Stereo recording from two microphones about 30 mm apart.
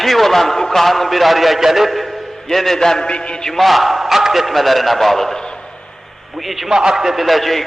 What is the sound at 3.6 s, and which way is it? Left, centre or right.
A man's voice, centre.